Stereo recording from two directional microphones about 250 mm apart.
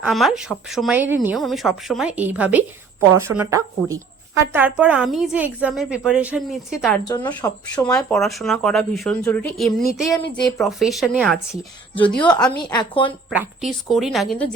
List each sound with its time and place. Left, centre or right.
0.0 s speech: centre
7.1 s speech: centre
10.1 s speech: centre
10.6 s speech: centre
11.5 s a woman's voice: centre
12.3 s speech: centre
12.7 s a woman's voice: centre
13.3 s speech: centre